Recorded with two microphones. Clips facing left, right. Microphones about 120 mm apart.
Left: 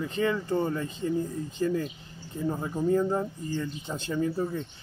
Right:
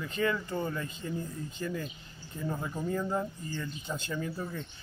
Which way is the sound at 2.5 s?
30° left (ahead or behind).